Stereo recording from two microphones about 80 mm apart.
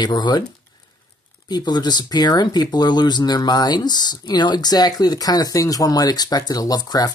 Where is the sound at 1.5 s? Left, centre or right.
Left.